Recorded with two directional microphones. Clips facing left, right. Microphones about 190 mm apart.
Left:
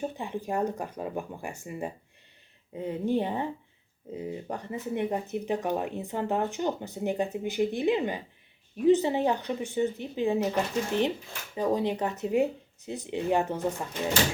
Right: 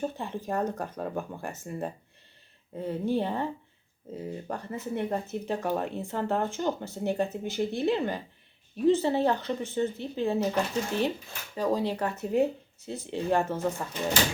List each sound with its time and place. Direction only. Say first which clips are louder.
0.0 s speech: even; 15° left (ahead or behind)
11.5 s speech: left 1 dB; 20° left (ahead or behind)